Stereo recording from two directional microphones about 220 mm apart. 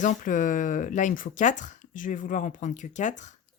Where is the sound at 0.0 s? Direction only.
35° left (ahead or behind).